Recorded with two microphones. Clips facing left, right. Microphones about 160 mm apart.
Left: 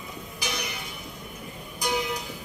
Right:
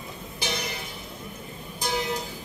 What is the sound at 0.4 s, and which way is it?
Music, 30° right (ahead or behind).